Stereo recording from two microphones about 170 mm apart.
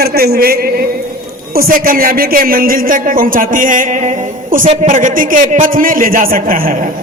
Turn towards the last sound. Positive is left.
turn(degrees=-55)  # may be behind; listen again after turning